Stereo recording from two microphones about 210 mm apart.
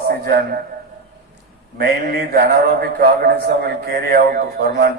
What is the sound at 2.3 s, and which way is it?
A man's voice, 50° right (ahead or behind).